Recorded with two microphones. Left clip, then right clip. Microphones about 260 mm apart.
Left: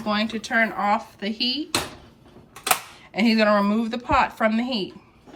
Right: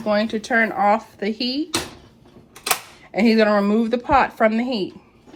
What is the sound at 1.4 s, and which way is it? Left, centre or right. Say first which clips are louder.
Speech: left 2 dB; left.